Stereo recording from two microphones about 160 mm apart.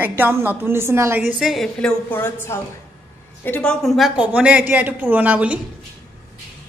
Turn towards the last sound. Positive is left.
turn(degrees=-10)  # may be behind; listen again after turning